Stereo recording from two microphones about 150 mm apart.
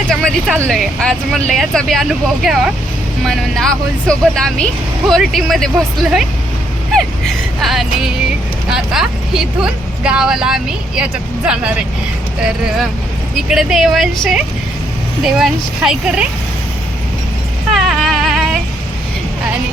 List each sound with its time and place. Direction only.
0.1 s speech: centre (ahead or behind)
13.5 s speech: centre (ahead or behind)
17.8 s music: centre (ahead or behind)